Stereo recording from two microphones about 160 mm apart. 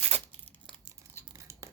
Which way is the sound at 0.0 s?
10° left (ahead or behind).